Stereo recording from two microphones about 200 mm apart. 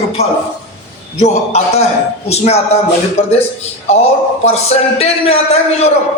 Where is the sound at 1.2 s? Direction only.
35° left (ahead or behind).